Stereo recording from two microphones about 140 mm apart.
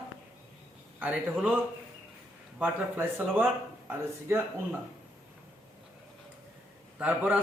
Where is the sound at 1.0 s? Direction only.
10° right (ahead or behind).